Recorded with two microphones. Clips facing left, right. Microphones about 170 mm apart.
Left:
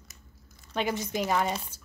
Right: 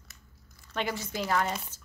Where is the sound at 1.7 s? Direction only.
10° left (ahead or behind).